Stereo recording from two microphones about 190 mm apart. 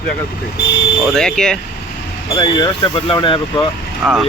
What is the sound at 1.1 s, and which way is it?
Speech, 5° left (ahead or behind).